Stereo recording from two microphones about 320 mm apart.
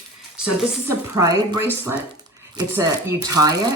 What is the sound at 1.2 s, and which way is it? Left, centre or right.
Speech, centre.